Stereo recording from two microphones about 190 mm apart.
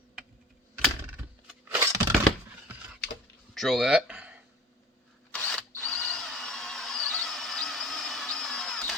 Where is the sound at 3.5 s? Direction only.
Centre (ahead or behind).